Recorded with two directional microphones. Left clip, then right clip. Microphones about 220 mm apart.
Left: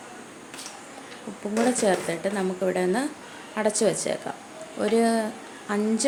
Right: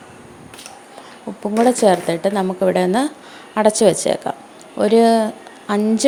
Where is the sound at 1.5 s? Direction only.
25° right (ahead or behind).